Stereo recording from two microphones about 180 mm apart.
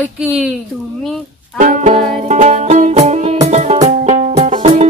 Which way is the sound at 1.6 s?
45° right (ahead or behind).